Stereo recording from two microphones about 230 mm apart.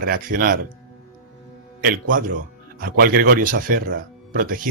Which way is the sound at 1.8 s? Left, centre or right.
Right.